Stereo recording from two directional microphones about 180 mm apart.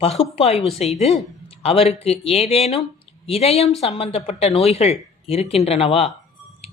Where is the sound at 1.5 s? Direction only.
35° left (ahead or behind).